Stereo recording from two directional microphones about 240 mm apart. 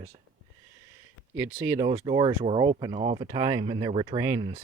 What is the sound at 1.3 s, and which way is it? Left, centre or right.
Speech, centre.